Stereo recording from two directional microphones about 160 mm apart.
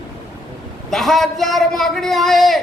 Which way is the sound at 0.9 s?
Centre (ahead or behind).